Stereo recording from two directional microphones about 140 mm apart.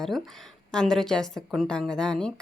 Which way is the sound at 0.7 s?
5° left (ahead or behind).